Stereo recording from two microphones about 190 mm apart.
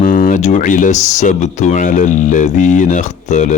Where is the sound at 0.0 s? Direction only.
45° left (ahead or behind).